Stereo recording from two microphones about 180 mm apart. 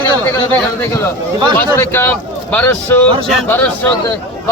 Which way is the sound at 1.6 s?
15° left (ahead or behind).